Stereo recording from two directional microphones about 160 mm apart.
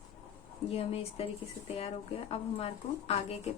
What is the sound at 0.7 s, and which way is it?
Speech, 40° left (ahead or behind).